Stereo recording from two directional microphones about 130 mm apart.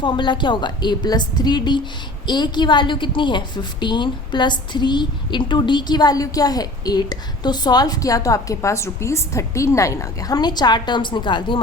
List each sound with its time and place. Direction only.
0.0 s a woman's voice: 40° left (ahead or behind)